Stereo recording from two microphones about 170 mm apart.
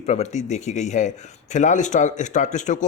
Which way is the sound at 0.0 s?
40° left (ahead or behind).